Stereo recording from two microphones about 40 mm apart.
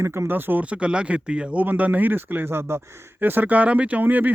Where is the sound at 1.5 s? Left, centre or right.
Right.